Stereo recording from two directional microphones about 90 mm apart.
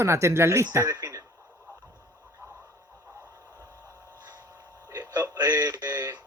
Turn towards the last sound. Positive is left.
turn(degrees=-40)  # may be behind; listen again after turning